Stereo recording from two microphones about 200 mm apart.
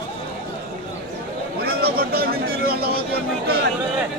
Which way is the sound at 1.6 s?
50° right (ahead or behind).